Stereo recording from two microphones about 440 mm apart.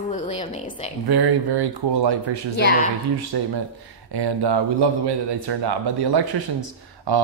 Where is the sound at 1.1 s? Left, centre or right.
Right.